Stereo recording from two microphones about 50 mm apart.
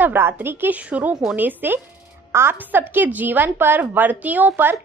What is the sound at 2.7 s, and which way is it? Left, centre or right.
A woman's voice, right.